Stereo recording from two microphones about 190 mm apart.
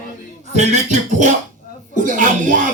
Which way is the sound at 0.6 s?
40° right (ahead or behind).